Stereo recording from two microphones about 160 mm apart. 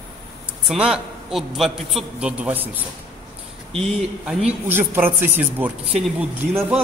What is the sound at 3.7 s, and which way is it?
Speech, centre (ahead or behind).